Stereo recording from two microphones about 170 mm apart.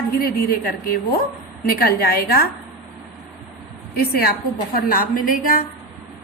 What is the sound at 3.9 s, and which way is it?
A woman's voice, 65° left (ahead or behind).